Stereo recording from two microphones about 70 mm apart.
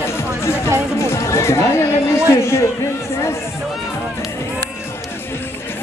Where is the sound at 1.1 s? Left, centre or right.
Left.